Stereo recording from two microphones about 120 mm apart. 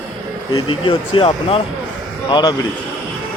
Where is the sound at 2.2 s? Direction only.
40° left (ahead or behind).